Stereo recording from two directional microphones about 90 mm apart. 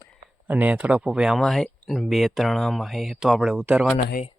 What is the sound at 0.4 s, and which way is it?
Speech, 20° right (ahead or behind).